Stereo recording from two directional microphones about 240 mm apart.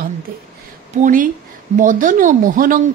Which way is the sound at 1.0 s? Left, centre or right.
Right.